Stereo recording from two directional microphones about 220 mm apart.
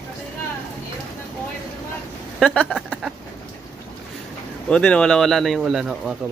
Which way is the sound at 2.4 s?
5° left (ahead or behind).